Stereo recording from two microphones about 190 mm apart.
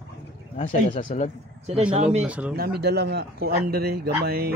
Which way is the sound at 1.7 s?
35° right (ahead or behind).